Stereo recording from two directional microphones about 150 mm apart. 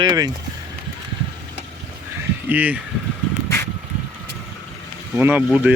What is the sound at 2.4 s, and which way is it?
Speech, 10° right (ahead or behind).